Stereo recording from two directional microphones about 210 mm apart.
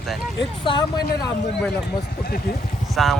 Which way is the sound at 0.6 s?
20° left (ahead or behind).